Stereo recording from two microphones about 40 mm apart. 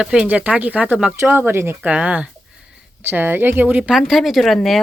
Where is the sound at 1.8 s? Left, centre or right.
Right.